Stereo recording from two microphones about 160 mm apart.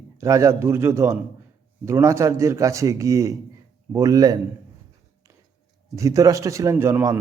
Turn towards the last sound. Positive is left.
turn(degrees=-15)  # may be behind; listen again after turning